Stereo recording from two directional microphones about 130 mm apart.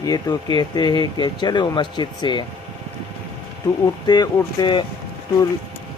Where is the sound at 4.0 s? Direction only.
30° left (ahead or behind).